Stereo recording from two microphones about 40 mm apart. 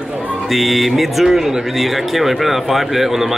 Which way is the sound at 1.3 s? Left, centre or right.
Centre.